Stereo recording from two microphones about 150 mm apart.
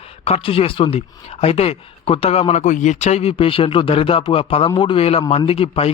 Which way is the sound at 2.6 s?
55° left (ahead or behind).